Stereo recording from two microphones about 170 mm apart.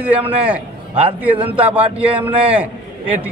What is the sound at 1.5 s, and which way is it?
A man's voice, 10° right (ahead or behind).